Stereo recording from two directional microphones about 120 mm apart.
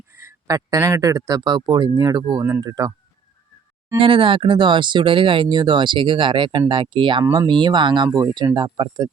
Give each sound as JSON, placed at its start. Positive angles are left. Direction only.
{"t": 0.1, "sound": "speech", "side_deg": -25}
{"t": 3.9, "sound": "speech", "side_deg": -45}